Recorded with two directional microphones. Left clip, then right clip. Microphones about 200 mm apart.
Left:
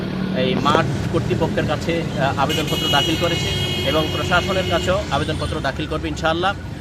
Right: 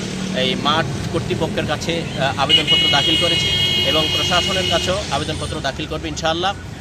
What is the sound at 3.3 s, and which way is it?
Speech, 45° left (ahead or behind).